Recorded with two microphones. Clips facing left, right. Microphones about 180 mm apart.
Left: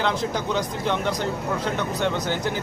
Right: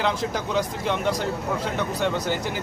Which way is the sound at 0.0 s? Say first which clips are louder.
Left 1 dB; 5° right (ahead or behind).